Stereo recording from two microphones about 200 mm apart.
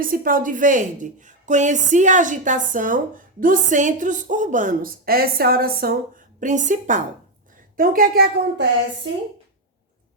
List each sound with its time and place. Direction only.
0.0 s a woman's voice: 45° right (ahead or behind)